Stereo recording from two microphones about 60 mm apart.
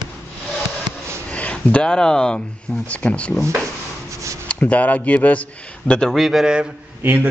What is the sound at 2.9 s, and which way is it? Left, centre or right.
Speech, left.